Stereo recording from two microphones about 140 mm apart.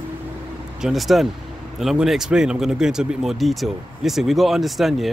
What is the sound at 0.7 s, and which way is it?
Speech, 5° right (ahead or behind).